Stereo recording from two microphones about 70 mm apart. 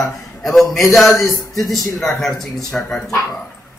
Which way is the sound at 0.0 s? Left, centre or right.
Centre.